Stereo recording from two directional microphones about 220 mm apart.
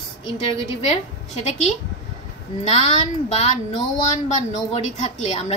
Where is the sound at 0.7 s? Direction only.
30° left (ahead or behind).